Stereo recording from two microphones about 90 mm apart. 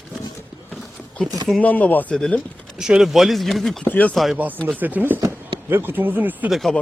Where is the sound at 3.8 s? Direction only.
15° left (ahead or behind).